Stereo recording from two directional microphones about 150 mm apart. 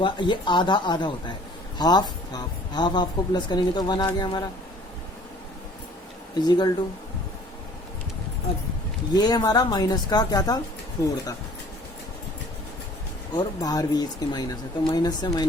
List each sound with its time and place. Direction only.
0.0 s speech: 30° left (ahead or behind)
6.3 s speech: 30° left (ahead or behind)
9.1 s speech: 25° left (ahead or behind)
13.3 s speech: 25° left (ahead or behind)